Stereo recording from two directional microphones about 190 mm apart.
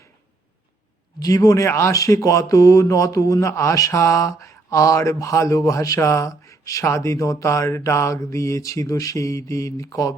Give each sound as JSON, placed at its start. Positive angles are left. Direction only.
{"t": 1.2, "sound": "speech", "side_deg": 15}